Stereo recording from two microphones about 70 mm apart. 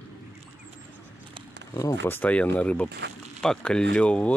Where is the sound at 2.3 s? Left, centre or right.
Centre.